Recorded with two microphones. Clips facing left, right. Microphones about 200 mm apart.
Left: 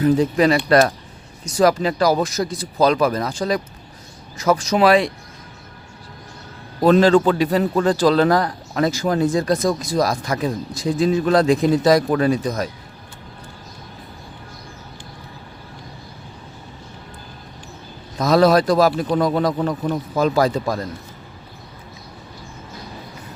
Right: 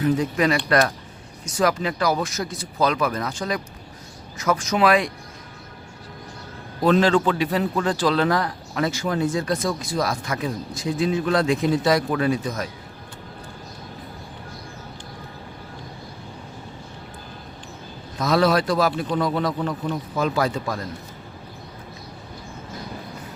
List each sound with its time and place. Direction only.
0.0 s a man's voice: 30° left (ahead or behind)
6.8 s a man's voice: 40° left (ahead or behind)
18.2 s a man's voice: 40° left (ahead or behind)